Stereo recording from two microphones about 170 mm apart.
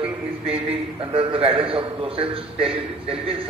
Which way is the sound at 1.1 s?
30° right (ahead or behind).